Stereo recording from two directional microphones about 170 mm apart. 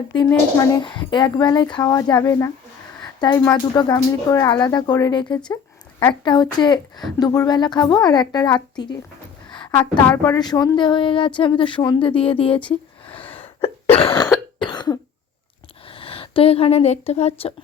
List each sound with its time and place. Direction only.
0.3 s speech: 20° left (ahead or behind)
3.0 s a sound: 25° left (ahead or behind)
3.4 s speech: 25° left (ahead or behind)
10.2 s speech: 25° left (ahead or behind)
12.6 s a sound: 30° left (ahead or behind)
14.2 s cough: 25° left (ahead or behind)
15.9 s speech: 30° left (ahead or behind)